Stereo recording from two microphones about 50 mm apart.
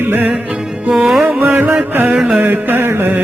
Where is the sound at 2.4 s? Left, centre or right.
Right.